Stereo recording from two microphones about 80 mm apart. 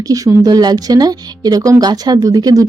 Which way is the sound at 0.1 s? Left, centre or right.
Right.